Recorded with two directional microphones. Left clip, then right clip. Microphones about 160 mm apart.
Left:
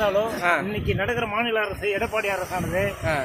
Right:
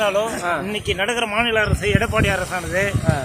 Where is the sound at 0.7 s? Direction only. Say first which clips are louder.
Right 4 dB; 10° right (ahead or behind).